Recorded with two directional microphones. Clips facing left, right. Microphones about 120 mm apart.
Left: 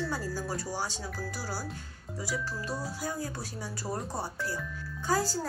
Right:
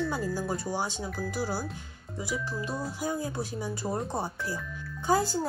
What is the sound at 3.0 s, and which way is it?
Speech, 20° right (ahead or behind).